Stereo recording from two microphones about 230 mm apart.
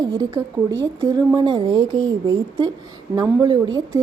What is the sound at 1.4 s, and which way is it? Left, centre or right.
A woman's voice, centre.